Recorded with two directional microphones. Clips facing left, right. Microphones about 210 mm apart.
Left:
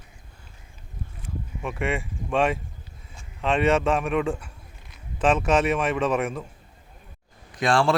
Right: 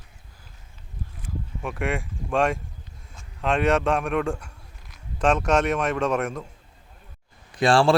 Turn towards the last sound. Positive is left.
turn(degrees=-30)  # may be behind; listen again after turning